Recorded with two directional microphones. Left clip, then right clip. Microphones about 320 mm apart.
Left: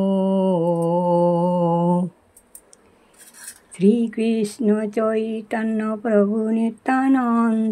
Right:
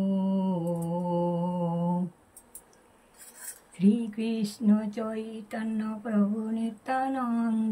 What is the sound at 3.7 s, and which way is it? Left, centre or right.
Speech, centre.